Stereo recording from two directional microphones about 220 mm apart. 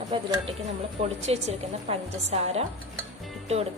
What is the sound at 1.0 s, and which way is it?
A woman's voice, 30° right (ahead or behind).